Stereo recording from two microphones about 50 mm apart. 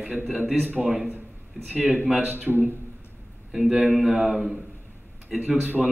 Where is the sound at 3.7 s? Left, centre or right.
Right.